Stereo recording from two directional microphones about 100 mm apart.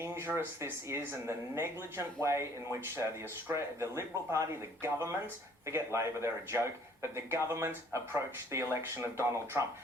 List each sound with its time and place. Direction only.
0.0 s speech: 25° right (ahead or behind)
3.5 s speech: 30° right (ahead or behind)